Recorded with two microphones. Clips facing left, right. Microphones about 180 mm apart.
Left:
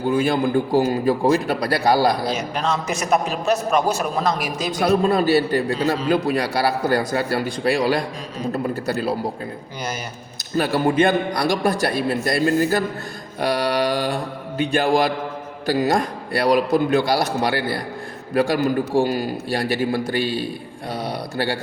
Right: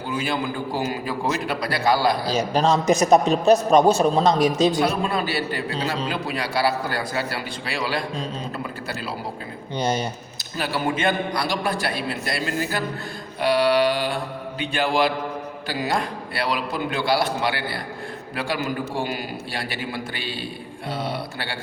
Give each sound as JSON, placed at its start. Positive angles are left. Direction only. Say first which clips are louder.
{"t": 0.1, "sound": "a man's voice", "louder": "left 7 dB", "side_deg": 50}
{"t": 2.2, "sound": "a man's voice", "louder": "right 3 dB", "side_deg": -35}
{"t": 4.7, "sound": "a man's voice", "louder": "left 4 dB", "side_deg": 40}
{"t": 9.7, "sound": "speech", "louder": "right 8 dB", "side_deg": -30}
{"t": 10.6, "sound": "a man's voice", "louder": "left 6 dB", "side_deg": 45}